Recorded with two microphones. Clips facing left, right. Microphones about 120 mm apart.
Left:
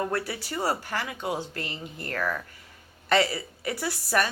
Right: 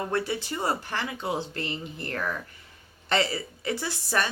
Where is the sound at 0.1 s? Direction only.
25° right (ahead or behind).